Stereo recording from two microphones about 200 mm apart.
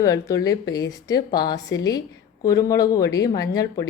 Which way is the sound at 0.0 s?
15° left (ahead or behind).